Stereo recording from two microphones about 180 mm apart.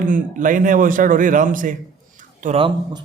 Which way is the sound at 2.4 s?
30° right (ahead or behind).